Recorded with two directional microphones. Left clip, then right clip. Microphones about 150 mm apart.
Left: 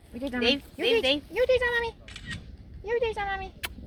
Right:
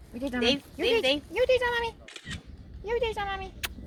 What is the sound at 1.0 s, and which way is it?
Speech, 55° left (ahead or behind).